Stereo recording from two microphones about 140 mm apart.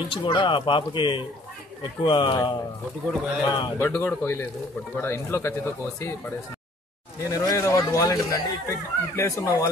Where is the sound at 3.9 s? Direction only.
15° left (ahead or behind).